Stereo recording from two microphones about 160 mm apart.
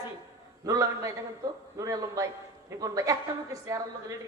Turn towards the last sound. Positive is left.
turn(degrees=-20)  # may be behind; listen again after turning